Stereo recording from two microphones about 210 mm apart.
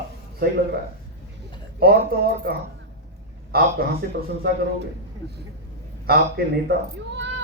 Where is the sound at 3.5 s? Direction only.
45° right (ahead or behind).